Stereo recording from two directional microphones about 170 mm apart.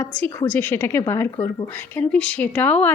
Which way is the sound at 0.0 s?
10° left (ahead or behind).